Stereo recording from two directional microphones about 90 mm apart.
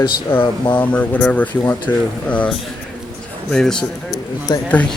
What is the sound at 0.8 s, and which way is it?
Speech, 15° left (ahead or behind).